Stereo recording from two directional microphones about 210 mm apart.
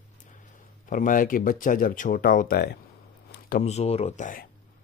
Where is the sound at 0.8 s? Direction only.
40° left (ahead or behind).